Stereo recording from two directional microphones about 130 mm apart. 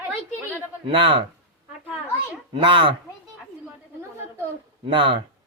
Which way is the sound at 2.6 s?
40° right (ahead or behind).